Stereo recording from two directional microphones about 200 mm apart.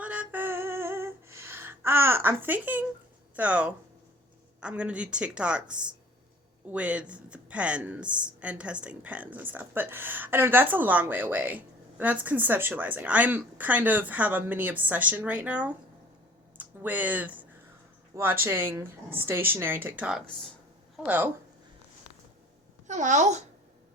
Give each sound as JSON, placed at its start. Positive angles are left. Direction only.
{"t": 0.0, "sound": "a sound", "side_deg": -5}
{"t": 3.3, "sound": "a woman's voice", "side_deg": -5}
{"t": 22.9, "sound": "a child's voice", "side_deg": -35}